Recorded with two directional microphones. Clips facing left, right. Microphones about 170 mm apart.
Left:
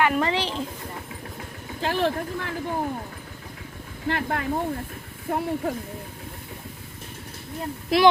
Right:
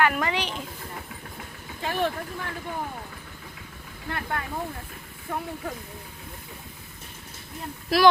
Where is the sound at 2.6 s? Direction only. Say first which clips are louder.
Left 6 dB; 35° left (ahead or behind).